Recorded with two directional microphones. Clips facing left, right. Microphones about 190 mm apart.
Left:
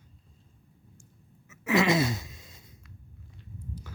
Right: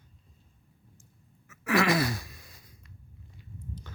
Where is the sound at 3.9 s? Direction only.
10° left (ahead or behind).